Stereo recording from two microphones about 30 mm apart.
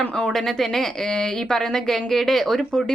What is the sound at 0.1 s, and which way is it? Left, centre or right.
Speech, left.